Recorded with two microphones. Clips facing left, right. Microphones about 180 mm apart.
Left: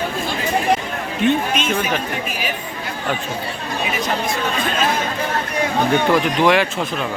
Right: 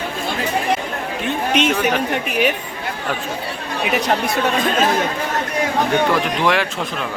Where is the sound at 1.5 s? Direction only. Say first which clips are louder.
Right 4 dB; 70° right (ahead or behind).